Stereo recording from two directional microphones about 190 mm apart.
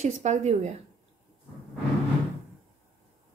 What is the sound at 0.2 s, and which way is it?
Speech, 35° right (ahead or behind).